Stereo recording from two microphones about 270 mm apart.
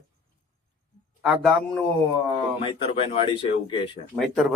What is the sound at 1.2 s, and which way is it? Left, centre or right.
Speech, centre.